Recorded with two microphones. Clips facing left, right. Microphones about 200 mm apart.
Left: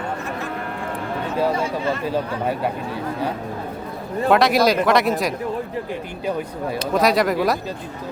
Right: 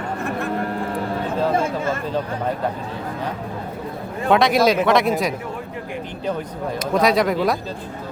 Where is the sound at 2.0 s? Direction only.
10° left (ahead or behind).